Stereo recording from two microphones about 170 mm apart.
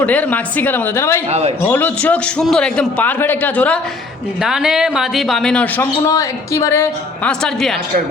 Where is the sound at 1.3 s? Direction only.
40° right (ahead or behind).